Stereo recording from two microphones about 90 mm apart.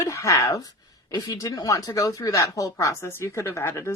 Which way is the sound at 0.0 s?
35° left (ahead or behind).